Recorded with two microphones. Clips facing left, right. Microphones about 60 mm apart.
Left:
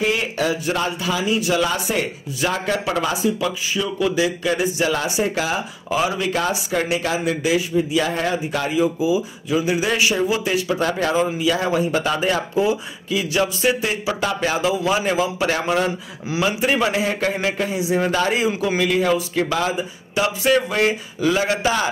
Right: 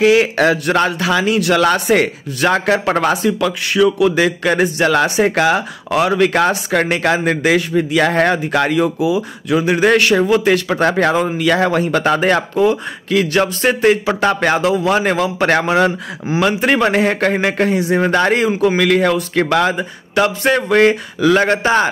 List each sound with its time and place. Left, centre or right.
0.0 s speech: right
18.8 s speech: right